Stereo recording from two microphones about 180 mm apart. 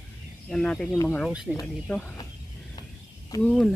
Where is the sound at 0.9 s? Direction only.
15° left (ahead or behind).